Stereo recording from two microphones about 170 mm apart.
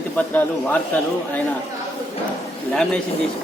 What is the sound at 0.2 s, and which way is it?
Speech, 10° left (ahead or behind).